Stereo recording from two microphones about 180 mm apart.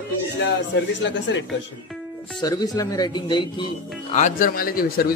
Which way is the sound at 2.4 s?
20° left (ahead or behind).